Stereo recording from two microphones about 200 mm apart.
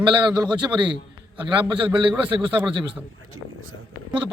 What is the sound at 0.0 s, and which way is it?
A man's voice, 20° right (ahead or behind).